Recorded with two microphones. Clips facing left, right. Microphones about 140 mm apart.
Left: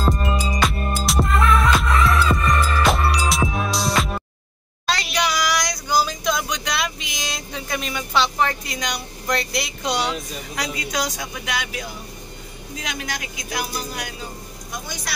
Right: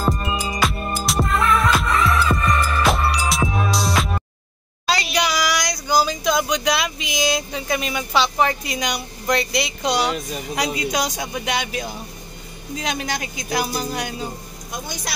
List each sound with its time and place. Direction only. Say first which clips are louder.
0.0 s music: left 1 dB; 5° right (ahead or behind)
4.8 s a sound: right 2 dB; 5° right (ahead or behind)
10.5 s speech: right 4 dB; 20° right (ahead or behind)